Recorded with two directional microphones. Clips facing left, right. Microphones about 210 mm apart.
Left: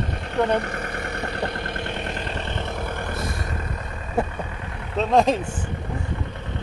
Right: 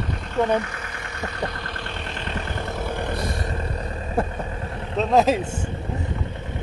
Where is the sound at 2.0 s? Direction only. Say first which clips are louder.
Left 3 dB; 50° left (ahead or behind).